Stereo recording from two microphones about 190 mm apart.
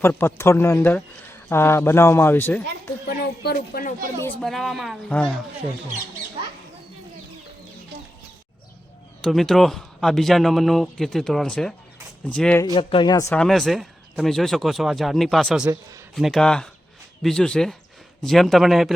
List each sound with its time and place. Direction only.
0.0 s speech: 10° left (ahead or behind)
3.1 s speech: 55° left (ahead or behind)
4.2 s speech: 5° left (ahead or behind)
9.2 s speech: centre (ahead or behind)
12.7 s a man's voice: 25° left (ahead or behind)
13.3 s speech: 5° left (ahead or behind)